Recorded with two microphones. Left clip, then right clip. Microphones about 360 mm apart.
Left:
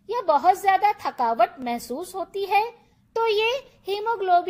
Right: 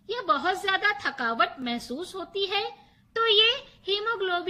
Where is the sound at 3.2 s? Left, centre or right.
Centre.